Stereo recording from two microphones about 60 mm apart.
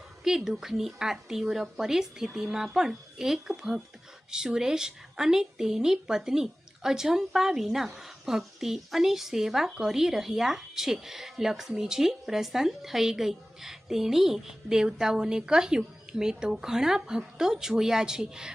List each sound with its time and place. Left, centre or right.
0.3 s a woman's voice: centre